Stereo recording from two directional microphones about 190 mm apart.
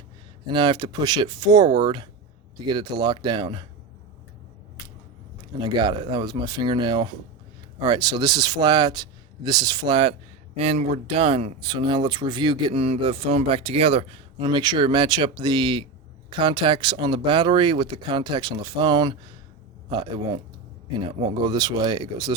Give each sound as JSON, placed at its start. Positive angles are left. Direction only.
{"t": 0.5, "sound": "speech", "side_deg": -25}
{"t": 5.5, "sound": "speech", "side_deg": -25}